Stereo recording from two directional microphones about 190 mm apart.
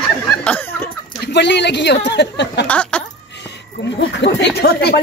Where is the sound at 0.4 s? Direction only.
10° left (ahead or behind).